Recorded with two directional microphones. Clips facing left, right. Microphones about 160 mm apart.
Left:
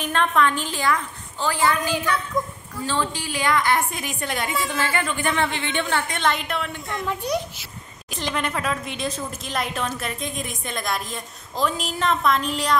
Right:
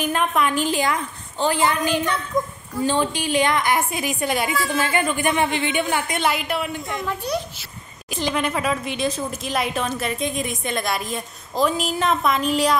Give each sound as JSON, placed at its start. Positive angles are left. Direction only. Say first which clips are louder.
{"t": 0.0, "sound": "a woman's voice", "louder": "even", "side_deg": -10}
{"t": 7.3, "sound": "speech", "louder": "left 1 dB", "side_deg": 15}
{"t": 8.1, "sound": "a woman's voice", "louder": "right 3 dB", "side_deg": -5}